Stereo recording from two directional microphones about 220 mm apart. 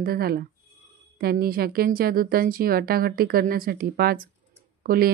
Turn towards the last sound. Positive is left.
turn(degrees=-45)  # may be behind; listen again after turning